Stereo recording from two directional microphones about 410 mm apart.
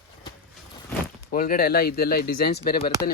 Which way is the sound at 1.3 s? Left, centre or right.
Left.